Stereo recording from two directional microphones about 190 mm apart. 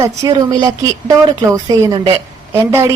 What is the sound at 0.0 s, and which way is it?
A woman's voice, 20° right (ahead or behind).